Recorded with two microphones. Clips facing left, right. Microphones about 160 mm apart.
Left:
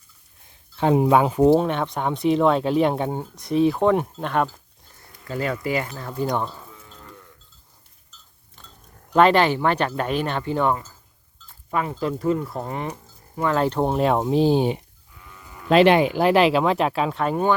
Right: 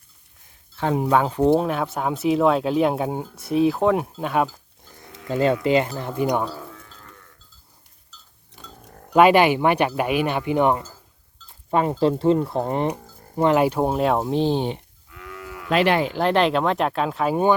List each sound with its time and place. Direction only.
0.8 s speech: 20° left (ahead or behind)
1.4 s speech: centre (ahead or behind)
5.3 s speech: 25° right (ahead or behind)
6.2 s speech: 15° right (ahead or behind)
8.6 s a sound: 65° right (ahead or behind)
9.1 s speech: 10° right (ahead or behind)
11.7 s speech: 30° right (ahead or behind)
13.0 s a sound: 55° right (ahead or behind)
13.3 s speech: 25° right (ahead or behind)
13.6 s speech: 10° right (ahead or behind); by 14.8 s 10° left (ahead or behind)
15.1 s cattle: 90° right
15.7 s speech: 25° left (ahead or behind)
16.0 s speech: 10° left (ahead or behind)